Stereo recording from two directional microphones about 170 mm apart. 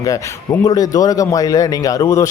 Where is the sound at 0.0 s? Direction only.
20° left (ahead or behind).